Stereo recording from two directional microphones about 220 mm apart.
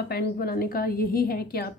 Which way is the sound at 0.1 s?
45° left (ahead or behind).